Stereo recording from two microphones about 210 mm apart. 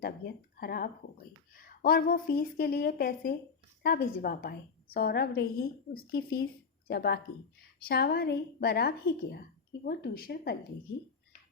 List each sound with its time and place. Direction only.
0.5 s a woman's voice: 45° left (ahead or behind)